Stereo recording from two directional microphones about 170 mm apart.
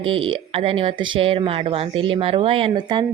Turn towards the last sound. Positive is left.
turn(degrees=-25)  # may be behind; listen again after turning